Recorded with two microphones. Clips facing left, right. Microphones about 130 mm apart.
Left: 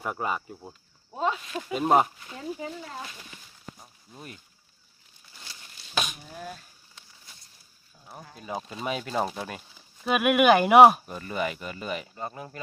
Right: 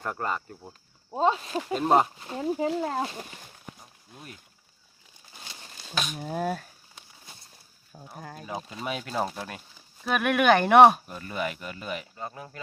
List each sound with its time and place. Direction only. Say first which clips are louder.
0.0 s speech: left 1 dB; 10° left (ahead or behind)
1.1 s speech: right 4 dB; 30° right (ahead or behind)
1.7 s speech: even; 5° left (ahead or behind)
2.1 s speech: right 7 dB; 35° right (ahead or behind)
2.8 s speech: right 10 dB; 55° right (ahead or behind)
5.9 s speech: left 1 dB; centre (ahead or behind)
6.1 s speech: right 11 dB; 55° right (ahead or behind)
7.9 s speech: right 4 dB; 55° right (ahead or behind)
8.8 s speech: left 1 dB; centre (ahead or behind)